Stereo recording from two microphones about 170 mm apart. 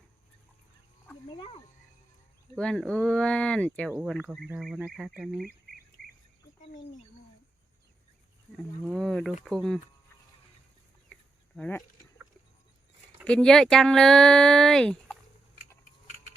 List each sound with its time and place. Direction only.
2.6 s speech: 5° left (ahead or behind)
3.9 s speech: 10° right (ahead or behind)
5.5 s duck: 60° right (ahead or behind)
8.8 s speech: centre (ahead or behind)
11.5 s speech: 5° left (ahead or behind)
13.2 s speech: 5° left (ahead or behind)